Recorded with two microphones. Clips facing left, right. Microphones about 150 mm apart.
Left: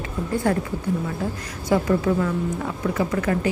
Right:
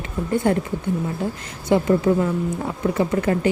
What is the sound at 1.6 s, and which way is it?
A woman's voice, 25° right (ahead or behind).